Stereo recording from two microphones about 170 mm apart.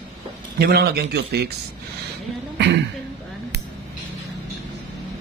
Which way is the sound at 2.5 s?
90° right.